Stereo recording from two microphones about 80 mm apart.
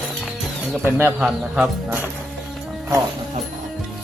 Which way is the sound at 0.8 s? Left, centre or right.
Right.